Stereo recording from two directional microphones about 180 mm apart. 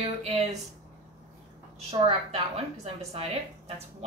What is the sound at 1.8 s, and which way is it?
A woman's voice, 35° right (ahead or behind).